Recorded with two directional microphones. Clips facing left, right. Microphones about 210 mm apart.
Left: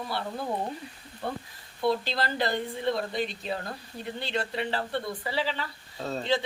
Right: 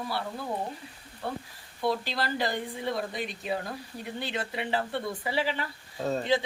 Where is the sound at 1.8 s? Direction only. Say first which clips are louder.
Left 2 dB; 10° right (ahead or behind).